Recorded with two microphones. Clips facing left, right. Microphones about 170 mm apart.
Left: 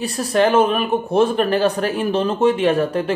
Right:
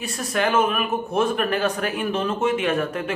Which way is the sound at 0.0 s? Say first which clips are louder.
Left 7 dB; 35° left (ahead or behind).